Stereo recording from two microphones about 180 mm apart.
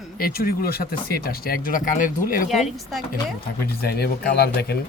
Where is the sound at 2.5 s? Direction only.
Centre (ahead or behind).